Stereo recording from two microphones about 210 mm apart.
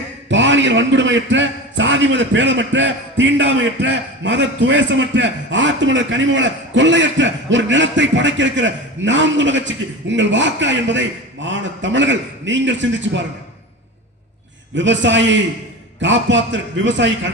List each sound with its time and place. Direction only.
0.3 s a man's voice: 60° right (ahead or behind)
14.8 s a man's voice: 60° right (ahead or behind)